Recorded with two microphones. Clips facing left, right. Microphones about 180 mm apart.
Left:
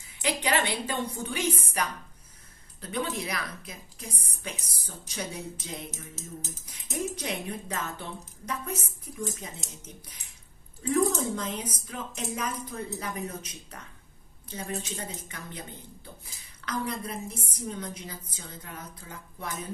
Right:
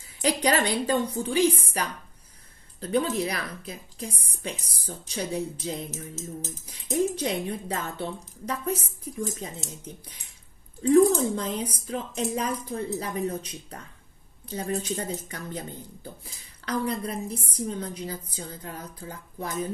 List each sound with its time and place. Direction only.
0.2 s speech: 40° right (ahead or behind)
10.8 s speech: 30° right (ahead or behind)